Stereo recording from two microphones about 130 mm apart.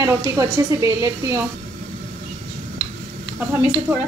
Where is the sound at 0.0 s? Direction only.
25° right (ahead or behind).